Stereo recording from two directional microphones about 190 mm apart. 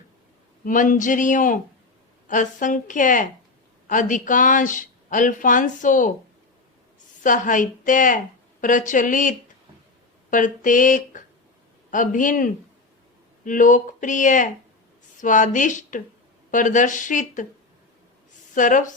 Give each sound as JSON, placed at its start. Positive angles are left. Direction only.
{"t": 0.6, "sound": "speech", "side_deg": 45}
{"t": 7.2, "sound": "speech", "side_deg": 45}
{"t": 18.5, "sound": "speech", "side_deg": 45}